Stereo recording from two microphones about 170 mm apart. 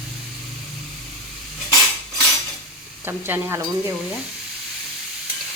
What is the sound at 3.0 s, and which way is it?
Sizzle, 15° right (ahead or behind).